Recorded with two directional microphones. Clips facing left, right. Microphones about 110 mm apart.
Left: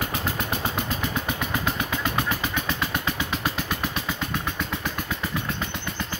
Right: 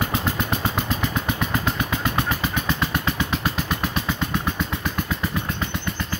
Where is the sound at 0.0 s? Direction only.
20° right (ahead or behind).